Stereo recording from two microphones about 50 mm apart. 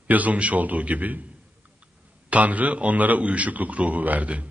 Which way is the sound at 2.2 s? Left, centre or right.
Right.